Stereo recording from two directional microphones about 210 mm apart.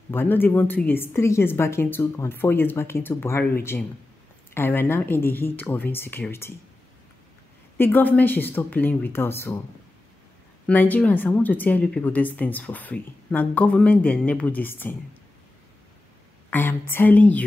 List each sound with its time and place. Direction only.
0.1 s speech: 10° left (ahead or behind)
7.7 s speech: 10° left (ahead or behind)
10.7 s speech: 10° left (ahead or behind)
16.4 s speech: 10° left (ahead or behind)